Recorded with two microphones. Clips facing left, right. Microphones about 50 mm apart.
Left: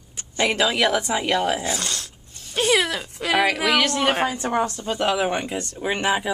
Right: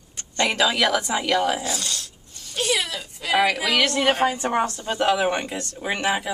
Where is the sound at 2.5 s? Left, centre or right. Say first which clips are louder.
Left 4 dB; left.